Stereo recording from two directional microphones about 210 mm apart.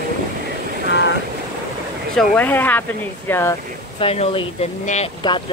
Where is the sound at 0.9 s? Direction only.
60° left (ahead or behind).